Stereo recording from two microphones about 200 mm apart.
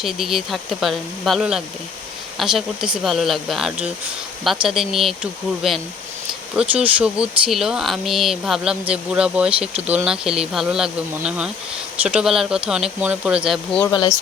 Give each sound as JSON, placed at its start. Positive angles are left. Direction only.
{"t": 0.0, "sound": "speech", "side_deg": 0}
{"t": 13.9, "sound": "speech", "side_deg": 20}